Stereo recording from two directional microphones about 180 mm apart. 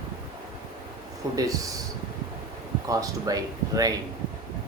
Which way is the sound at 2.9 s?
20° right (ahead or behind).